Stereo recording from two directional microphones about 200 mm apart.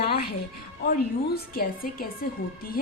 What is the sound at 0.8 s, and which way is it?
A woman's voice, 50° left (ahead or behind).